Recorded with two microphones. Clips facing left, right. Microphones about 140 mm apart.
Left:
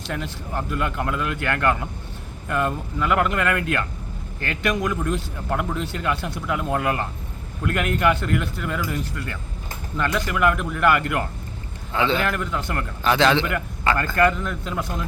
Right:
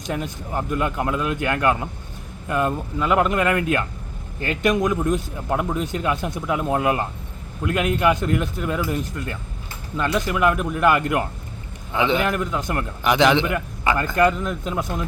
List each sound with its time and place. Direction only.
0.1 s a man's voice: 20° right (ahead or behind)